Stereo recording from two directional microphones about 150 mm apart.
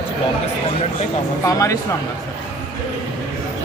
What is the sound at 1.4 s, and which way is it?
Speech, 20° left (ahead or behind).